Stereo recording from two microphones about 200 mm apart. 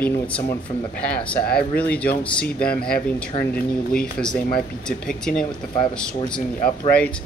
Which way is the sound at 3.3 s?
30° left (ahead or behind).